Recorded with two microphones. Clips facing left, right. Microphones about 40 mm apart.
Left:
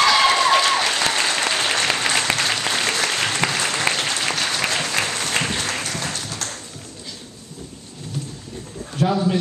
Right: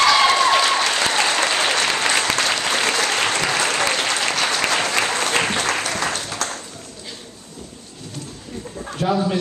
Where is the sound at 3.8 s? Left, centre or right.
Centre.